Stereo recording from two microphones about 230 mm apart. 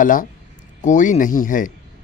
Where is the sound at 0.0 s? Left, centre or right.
Left.